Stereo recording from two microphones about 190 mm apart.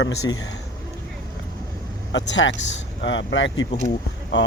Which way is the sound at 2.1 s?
75° left (ahead or behind).